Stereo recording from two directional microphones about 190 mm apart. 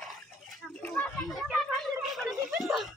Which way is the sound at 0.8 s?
5° left (ahead or behind).